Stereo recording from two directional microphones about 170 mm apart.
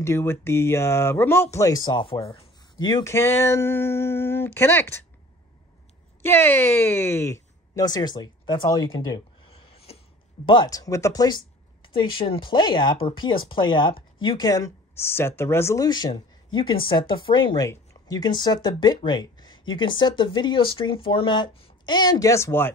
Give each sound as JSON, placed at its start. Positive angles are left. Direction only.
{"t": 0.0, "sound": "speech", "side_deg": 15}
{"t": 6.2, "sound": "speech", "side_deg": 15}
{"t": 9.5, "sound": "a sound", "side_deg": 35}
{"t": 10.4, "sound": "speech", "side_deg": 25}